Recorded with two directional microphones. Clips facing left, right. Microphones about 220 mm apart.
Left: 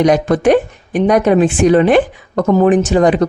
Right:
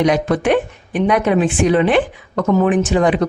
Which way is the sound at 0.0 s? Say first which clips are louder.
Left 4 dB; 45° left (ahead or behind).